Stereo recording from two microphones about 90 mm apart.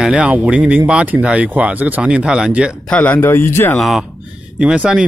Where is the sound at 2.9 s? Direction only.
20° left (ahead or behind).